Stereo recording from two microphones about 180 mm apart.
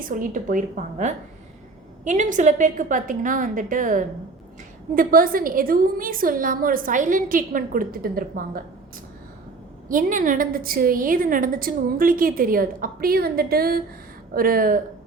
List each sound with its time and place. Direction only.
0.0 s a woman's voice: 50° right (ahead or behind)
9.9 s a woman's voice: 45° right (ahead or behind)